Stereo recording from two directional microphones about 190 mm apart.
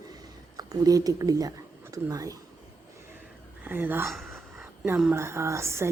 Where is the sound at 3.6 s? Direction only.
10° right (ahead or behind).